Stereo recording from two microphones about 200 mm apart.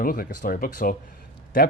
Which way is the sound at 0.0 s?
45° left (ahead or behind).